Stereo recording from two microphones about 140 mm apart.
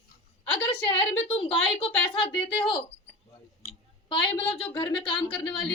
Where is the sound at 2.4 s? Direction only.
35° left (ahead or behind).